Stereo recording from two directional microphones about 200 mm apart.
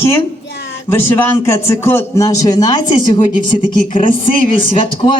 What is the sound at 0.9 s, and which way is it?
A man's voice, 10° left (ahead or behind).